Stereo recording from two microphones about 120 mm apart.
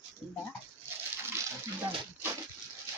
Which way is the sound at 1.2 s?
20° right (ahead or behind).